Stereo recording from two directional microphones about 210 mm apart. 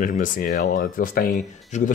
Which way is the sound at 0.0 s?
40° left (ahead or behind).